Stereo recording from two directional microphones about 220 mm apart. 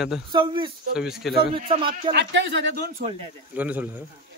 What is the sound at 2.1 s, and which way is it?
Speech, 50° right (ahead or behind).